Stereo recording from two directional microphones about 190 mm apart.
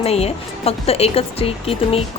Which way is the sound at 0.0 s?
30° left (ahead or behind).